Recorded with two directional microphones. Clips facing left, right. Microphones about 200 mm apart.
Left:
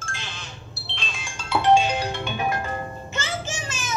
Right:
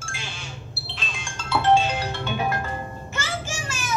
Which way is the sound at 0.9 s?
Centre (ahead or behind).